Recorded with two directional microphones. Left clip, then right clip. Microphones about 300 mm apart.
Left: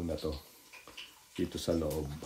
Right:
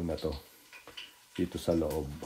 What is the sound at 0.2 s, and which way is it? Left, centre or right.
Speech, centre.